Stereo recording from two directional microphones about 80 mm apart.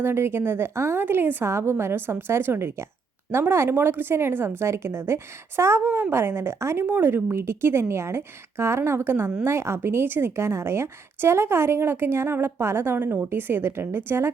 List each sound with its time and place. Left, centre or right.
0.0 s a woman's voice: right